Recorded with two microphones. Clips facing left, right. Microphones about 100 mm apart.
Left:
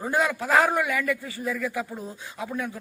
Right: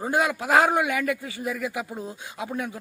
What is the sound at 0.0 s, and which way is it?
A man's voice, 15° right (ahead or behind).